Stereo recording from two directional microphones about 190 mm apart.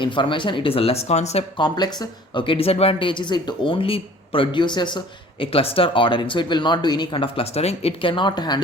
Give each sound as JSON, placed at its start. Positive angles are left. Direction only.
{"t": 0.0, "sound": "speech", "side_deg": 25}